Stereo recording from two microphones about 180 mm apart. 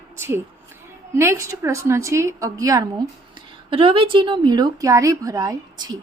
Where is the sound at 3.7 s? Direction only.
30° right (ahead or behind).